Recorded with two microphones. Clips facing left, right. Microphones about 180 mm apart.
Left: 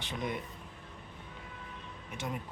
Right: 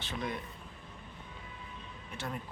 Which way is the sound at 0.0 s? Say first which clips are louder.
Left 1 dB; 20° left (ahead or behind).